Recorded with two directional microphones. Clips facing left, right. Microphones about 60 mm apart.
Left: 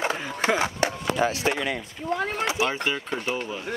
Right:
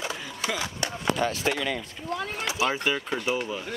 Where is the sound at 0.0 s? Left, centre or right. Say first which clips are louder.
Left 6 dB; left.